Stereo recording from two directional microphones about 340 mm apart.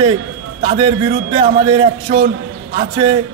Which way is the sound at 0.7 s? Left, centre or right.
Centre.